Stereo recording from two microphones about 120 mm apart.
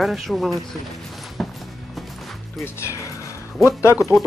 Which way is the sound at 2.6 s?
25° left (ahead or behind).